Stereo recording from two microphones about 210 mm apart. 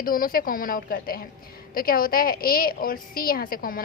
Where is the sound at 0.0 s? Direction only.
45° left (ahead or behind).